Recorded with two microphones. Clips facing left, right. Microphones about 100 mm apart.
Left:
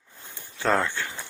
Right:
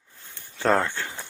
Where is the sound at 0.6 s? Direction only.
35° right (ahead or behind).